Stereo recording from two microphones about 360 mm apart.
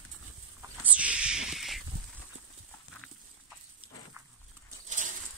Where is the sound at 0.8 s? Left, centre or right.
Centre.